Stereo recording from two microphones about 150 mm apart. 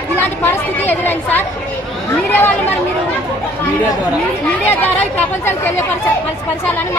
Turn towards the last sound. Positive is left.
turn(degrees=10)  # may be behind; listen again after turning